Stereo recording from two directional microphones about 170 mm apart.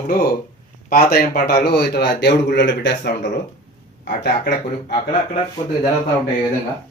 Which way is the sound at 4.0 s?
70° left (ahead or behind).